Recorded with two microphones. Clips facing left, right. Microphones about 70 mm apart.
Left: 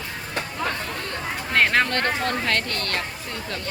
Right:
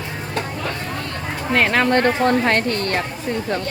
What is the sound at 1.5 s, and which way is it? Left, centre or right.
Speech, centre.